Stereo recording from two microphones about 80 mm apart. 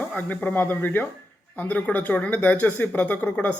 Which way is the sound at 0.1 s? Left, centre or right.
Centre.